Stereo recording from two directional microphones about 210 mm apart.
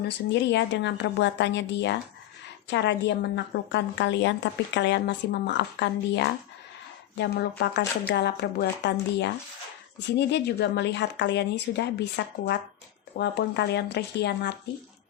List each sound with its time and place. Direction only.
0.4 s a woman's voice: 55° left (ahead or behind)